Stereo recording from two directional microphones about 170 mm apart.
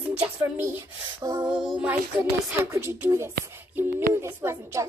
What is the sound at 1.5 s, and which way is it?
Music, centre (ahead or behind).